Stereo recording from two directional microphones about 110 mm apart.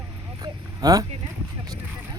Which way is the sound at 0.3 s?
35° right (ahead or behind).